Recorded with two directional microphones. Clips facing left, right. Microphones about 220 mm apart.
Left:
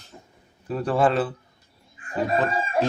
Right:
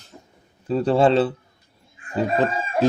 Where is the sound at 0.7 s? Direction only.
25° right (ahead or behind).